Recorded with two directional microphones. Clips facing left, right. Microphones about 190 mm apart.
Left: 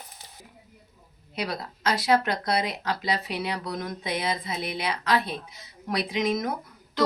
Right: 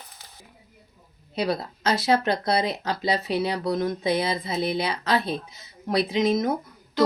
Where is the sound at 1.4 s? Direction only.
25° right (ahead or behind).